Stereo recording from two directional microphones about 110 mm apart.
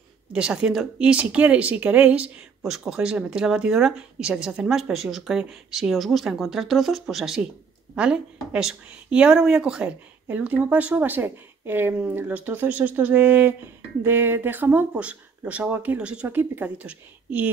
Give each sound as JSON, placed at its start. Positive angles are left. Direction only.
{"t": 0.3, "sound": "speech", "side_deg": -10}